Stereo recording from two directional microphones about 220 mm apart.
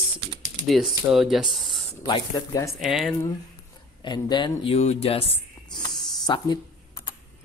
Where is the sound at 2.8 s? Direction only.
Centre (ahead or behind).